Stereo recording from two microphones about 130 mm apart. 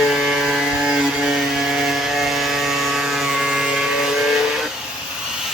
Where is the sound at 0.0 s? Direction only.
Centre (ahead or behind).